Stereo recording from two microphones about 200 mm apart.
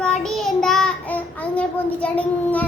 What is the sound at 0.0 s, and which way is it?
Child singing, 5° left (ahead or behind).